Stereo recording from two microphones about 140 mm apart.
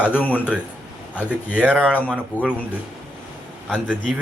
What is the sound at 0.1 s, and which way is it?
Speech, 10° left (ahead or behind).